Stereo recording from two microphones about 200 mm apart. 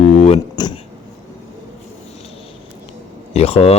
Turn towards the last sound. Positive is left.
turn(degrees=30)  # may be behind; listen again after turning